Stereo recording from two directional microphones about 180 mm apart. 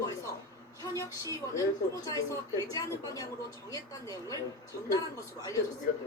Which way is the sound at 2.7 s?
20° left (ahead or behind).